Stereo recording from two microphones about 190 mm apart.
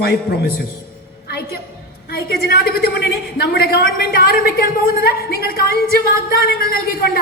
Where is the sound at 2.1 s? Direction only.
55° left (ahead or behind).